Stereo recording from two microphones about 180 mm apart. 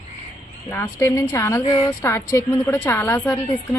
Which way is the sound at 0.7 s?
15° left (ahead or behind).